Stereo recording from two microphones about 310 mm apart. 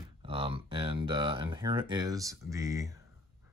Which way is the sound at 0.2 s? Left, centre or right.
Centre.